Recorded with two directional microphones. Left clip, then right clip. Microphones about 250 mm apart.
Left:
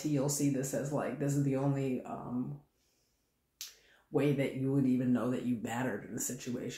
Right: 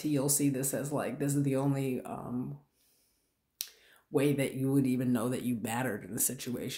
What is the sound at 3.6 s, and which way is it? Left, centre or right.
Finger snapping, right.